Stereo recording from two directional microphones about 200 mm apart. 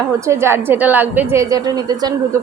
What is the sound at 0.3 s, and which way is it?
A woman's voice, 15° right (ahead or behind).